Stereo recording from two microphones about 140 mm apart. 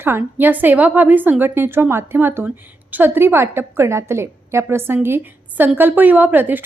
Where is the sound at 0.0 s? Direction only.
15° right (ahead or behind).